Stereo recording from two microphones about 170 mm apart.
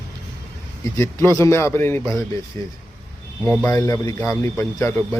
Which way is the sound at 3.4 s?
10° left (ahead or behind).